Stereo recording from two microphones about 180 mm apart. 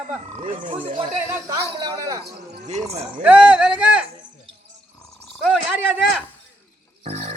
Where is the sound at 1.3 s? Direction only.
20° right (ahead or behind).